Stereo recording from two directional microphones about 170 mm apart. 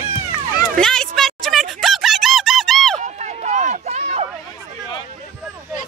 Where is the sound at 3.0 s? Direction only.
45° right (ahead or behind).